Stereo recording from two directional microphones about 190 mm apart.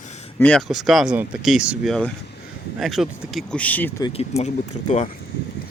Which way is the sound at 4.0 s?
30° left (ahead or behind).